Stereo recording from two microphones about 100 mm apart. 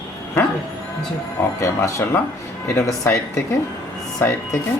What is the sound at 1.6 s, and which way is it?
A woman's voice, 30° left (ahead or behind).